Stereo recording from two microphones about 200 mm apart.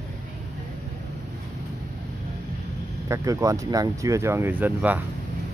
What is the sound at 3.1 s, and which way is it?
Speech, 15° right (ahead or behind).